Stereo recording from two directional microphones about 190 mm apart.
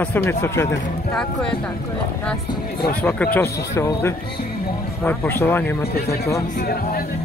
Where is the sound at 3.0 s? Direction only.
10° left (ahead or behind).